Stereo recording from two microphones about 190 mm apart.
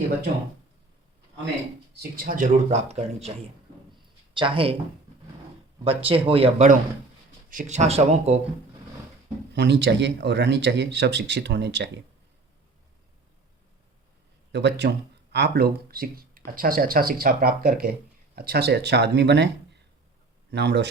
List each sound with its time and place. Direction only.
1.9 s speech: 55° right (ahead or behind); by 3.3 s 35° right (ahead or behind)
4.4 s speech: 25° right (ahead or behind)
5.8 s speech: 30° right (ahead or behind)
9.5 s speech: 65° right (ahead or behind)
14.5 s speech: 65° right (ahead or behind)
20.5 s speech: 65° right (ahead or behind)